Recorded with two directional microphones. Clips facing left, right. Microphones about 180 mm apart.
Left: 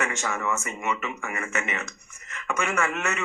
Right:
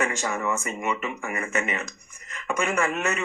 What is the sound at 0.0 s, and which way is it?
A man's voice, 35° right (ahead or behind).